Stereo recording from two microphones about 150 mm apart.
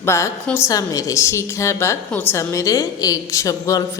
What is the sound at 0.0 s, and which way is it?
A woman's voice, 20° left (ahead or behind).